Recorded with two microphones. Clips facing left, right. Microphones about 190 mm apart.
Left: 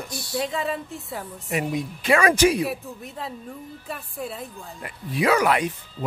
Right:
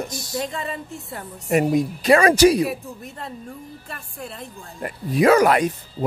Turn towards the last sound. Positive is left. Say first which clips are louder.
# right 5 dB
turn(degrees=-45)  # may be behind; listen again after turning